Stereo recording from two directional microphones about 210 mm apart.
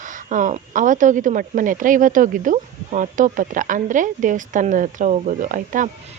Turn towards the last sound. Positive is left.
turn(degrees=-40)  # may be behind; listen again after turning